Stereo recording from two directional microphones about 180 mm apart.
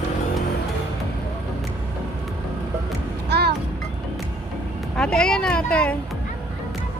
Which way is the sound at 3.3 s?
65° right (ahead or behind).